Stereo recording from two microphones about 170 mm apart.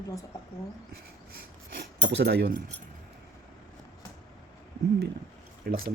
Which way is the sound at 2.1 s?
75° right (ahead or behind).